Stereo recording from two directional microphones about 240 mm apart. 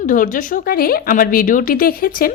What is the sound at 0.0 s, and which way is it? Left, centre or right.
A woman's voice, left.